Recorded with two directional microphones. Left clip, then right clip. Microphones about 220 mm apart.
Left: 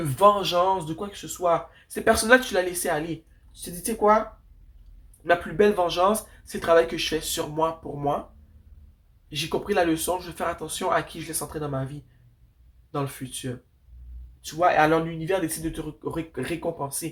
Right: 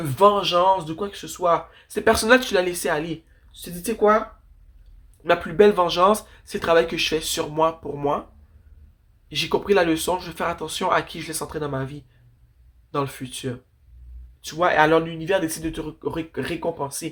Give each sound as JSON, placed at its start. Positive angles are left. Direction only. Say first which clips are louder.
{"t": 0.0, "sound": "speech", "louder": "right 2 dB", "side_deg": -35}
{"t": 5.2, "sound": "speech", "louder": "right 4 dB", "side_deg": -35}
{"t": 9.3, "sound": "speech", "louder": "right 5 dB", "side_deg": -35}